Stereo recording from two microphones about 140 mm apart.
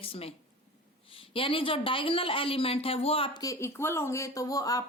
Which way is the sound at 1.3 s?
40° left (ahead or behind).